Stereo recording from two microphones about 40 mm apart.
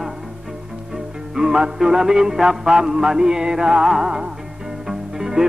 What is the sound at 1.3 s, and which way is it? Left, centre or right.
Music, centre.